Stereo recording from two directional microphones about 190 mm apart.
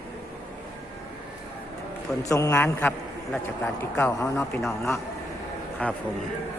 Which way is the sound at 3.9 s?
15° left (ahead or behind).